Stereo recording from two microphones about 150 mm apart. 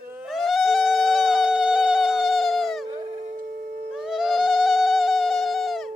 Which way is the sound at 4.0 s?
5° right (ahead or behind).